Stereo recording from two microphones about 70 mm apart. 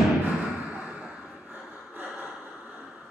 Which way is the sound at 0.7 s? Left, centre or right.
Centre.